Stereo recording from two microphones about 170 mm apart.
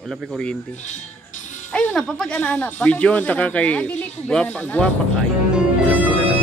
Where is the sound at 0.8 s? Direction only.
45° left (ahead or behind).